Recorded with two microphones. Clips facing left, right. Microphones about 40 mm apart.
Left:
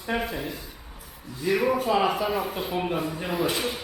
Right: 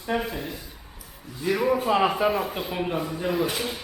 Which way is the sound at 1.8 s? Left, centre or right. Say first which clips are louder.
Right 1 dB; centre.